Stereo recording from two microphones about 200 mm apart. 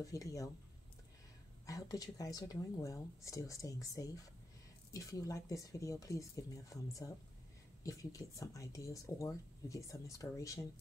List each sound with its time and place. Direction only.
0.0 s speech: 15° left (ahead or behind)
1.7 s speech: 20° left (ahead or behind)